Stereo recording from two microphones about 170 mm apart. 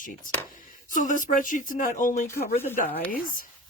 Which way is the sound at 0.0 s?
50° left (ahead or behind).